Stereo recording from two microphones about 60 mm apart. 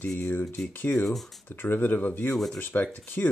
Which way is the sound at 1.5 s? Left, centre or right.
Left.